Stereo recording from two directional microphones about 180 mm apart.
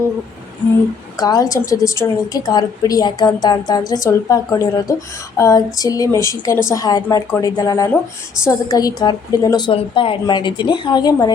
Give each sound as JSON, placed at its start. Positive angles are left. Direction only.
{"t": 1.2, "sound": "a woman's voice", "side_deg": 20}